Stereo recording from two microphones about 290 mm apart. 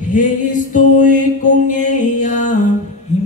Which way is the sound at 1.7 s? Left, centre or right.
Left.